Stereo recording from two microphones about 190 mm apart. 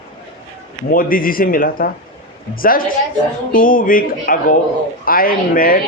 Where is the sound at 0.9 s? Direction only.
45° left (ahead or behind).